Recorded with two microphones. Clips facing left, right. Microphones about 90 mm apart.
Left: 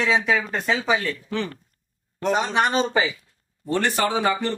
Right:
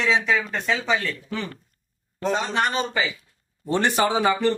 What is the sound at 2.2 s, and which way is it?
Speech, 15° left (ahead or behind).